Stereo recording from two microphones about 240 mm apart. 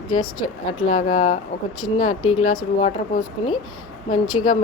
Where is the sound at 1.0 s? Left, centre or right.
Left.